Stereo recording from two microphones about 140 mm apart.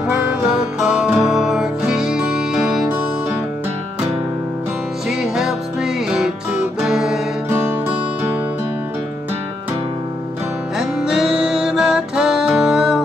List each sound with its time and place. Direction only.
0.0 s music: 10° right (ahead or behind)
5.1 s music: 5° right (ahead or behind)
10.8 s music: 5° right (ahead or behind)